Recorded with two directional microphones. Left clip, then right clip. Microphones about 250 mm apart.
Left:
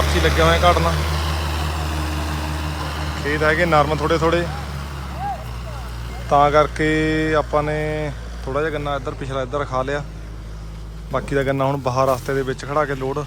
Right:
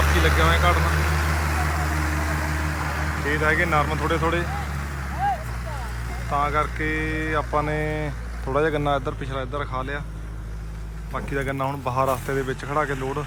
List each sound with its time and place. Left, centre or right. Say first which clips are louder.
0.3 s speech: left 8 dB; centre
0.8 s vehicle: left 3 dB; left
3.2 s speech: left 4 dB; centre
6.3 s speech: left 9 dB; centre
11.1 s speech: left 7 dB; centre